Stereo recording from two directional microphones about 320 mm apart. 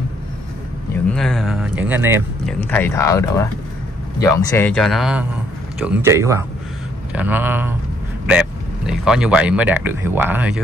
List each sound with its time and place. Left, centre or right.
1.1 s speech: centre
2.6 s speech: centre